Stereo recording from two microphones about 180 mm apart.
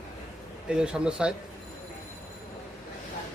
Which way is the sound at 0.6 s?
5° right (ahead or behind).